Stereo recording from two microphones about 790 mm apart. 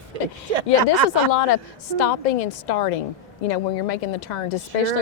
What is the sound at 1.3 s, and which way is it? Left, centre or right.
A woman's voice, left.